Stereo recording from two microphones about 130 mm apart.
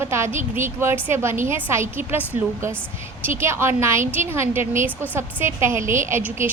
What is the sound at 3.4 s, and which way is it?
A woman's voice, 20° right (ahead or behind).